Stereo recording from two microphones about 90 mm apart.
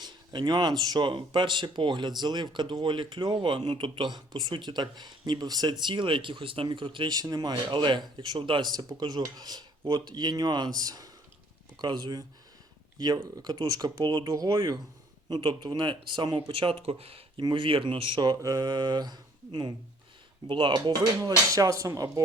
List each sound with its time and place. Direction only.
0.0 s speech: 55° right (ahead or behind)
5.8 s speech: 60° right (ahead or behind)
7.1 s speech: 45° right (ahead or behind)
7.7 s speech: 60° right (ahead or behind)
13.3 s speech: 50° right (ahead or behind)
16.5 s speech: 80° right
17.4 s speech: 70° right (ahead or behind)
18.4 s speech: 50° right (ahead or behind)
21.2 s speech: 40° right (ahead or behind)